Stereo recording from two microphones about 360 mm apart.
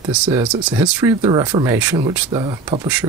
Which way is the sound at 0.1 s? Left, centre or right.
Centre.